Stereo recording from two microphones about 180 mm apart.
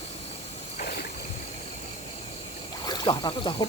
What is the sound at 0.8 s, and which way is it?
Rowboat, 55° left (ahead or behind).